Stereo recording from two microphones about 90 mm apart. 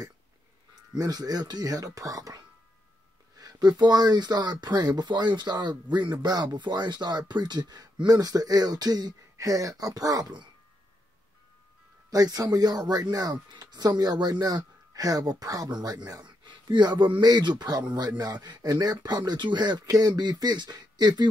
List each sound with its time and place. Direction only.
0.9 s speech: 45° right (ahead or behind)
12.1 s speech: 45° right (ahead or behind)